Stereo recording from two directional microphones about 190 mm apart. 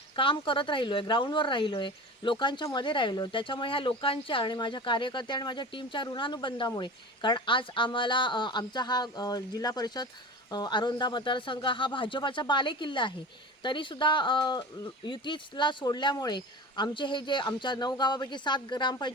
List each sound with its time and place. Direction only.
0.2 s speech: 25° left (ahead or behind)